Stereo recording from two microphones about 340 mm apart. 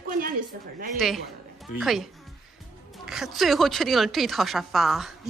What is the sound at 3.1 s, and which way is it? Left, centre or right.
Speech, centre.